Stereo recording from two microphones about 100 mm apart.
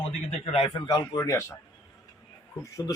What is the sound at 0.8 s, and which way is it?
Speech, 45° left (ahead or behind).